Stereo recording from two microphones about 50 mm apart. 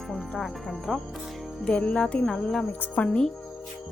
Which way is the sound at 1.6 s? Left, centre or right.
Centre.